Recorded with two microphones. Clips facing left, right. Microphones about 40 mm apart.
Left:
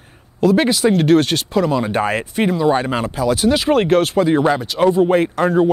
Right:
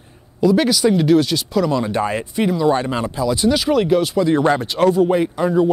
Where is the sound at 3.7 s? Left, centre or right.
Left.